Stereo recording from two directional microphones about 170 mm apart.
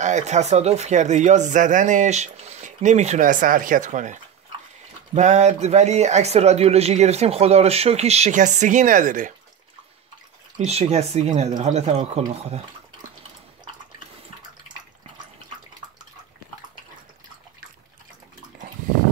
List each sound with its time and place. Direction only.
0.0 s speech: 45° right (ahead or behind)
10.6 s speech: 40° right (ahead or behind)